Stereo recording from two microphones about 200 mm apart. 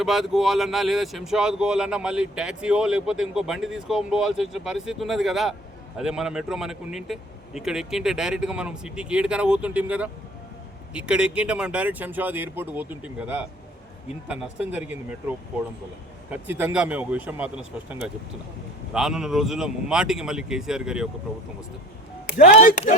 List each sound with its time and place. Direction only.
0.0 s speech: centre (ahead or behind)
18.9 s speech: centre (ahead or behind)
22.3 s speech: 45° left (ahead or behind)